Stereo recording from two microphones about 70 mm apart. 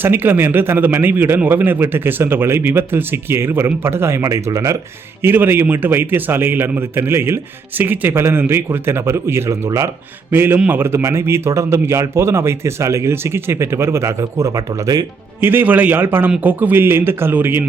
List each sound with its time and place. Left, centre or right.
0.0 s a man's voice: right
5.2 s a man's voice: right
9.6 s speech: right
10.3 s a man's voice: right
15.4 s a man's voice: right